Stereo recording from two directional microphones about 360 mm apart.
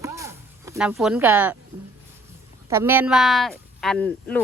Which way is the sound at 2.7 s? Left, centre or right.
Centre.